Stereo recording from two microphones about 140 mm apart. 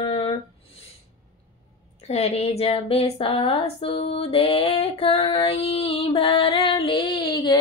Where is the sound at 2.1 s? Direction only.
50° left (ahead or behind).